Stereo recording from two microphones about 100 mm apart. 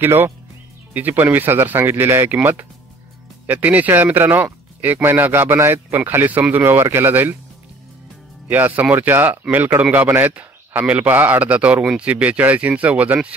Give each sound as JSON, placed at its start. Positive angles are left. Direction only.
{"t": 0.0, "sound": "speech", "side_deg": -20}
{"t": 3.4, "sound": "speech", "side_deg": -15}
{"t": 8.5, "sound": "a man's voice", "side_deg": -20}